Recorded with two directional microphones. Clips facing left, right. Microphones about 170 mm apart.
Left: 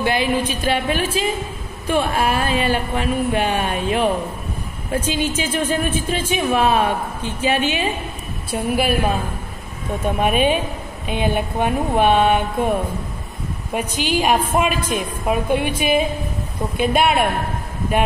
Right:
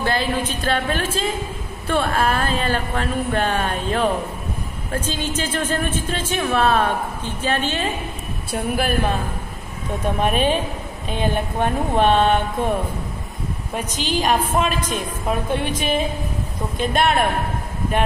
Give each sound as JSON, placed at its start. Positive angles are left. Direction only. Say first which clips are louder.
{"t": 0.0, "sound": "a woman's voice", "louder": "left 3 dB", "side_deg": 15}
{"t": 13.7, "sound": "speech", "louder": "left 3 dB", "side_deg": 10}